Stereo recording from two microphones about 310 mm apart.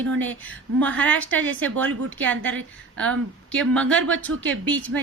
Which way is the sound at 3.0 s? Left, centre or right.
Centre.